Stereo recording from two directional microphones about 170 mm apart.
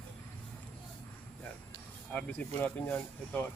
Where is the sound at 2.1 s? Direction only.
5° left (ahead or behind).